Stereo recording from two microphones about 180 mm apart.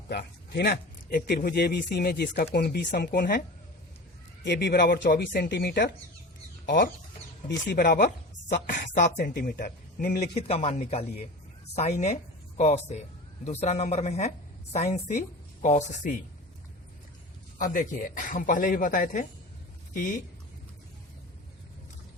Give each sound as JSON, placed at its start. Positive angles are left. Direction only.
{"t": 0.1, "sound": "a man's voice", "side_deg": 65}
{"t": 4.4, "sound": "a man's voice", "side_deg": 70}
{"t": 7.4, "sound": "a man's voice", "side_deg": 60}
{"t": 8.4, "sound": "a woman's voice", "side_deg": 45}
{"t": 8.7, "sound": "a man's voice", "side_deg": 70}
{"t": 10.3, "sound": "a man's voice", "side_deg": 35}
{"t": 17.6, "sound": "speech", "side_deg": 50}